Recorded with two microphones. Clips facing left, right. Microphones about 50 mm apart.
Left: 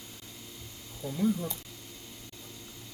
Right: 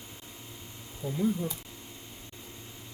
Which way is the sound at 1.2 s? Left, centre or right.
Centre.